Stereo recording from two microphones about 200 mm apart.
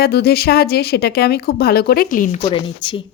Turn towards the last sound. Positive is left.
turn(degrees=25)  # may be behind; listen again after turning